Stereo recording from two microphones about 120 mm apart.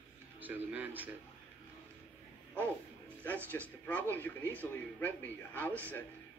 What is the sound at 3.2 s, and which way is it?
A man's voice, 15° left (ahead or behind).